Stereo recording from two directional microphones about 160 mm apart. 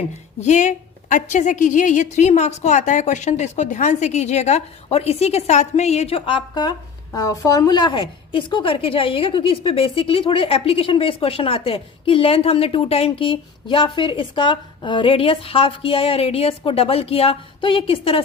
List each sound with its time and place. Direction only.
0.3 s a woman's voice: 45° left (ahead or behind)